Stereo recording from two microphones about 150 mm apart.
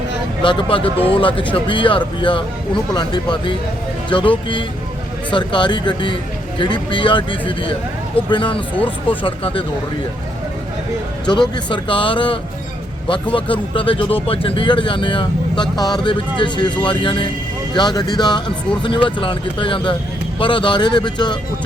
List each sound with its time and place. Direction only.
0.4 s speech: 35° left (ahead or behind)
11.3 s speech: 30° left (ahead or behind)